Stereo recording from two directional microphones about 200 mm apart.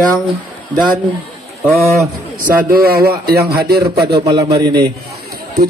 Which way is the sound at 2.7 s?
50° right (ahead or behind).